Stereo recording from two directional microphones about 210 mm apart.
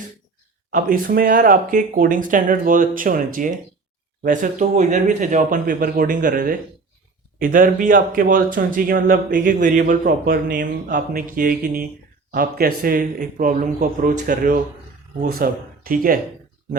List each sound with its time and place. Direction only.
0.7 s speech: 40° right (ahead or behind)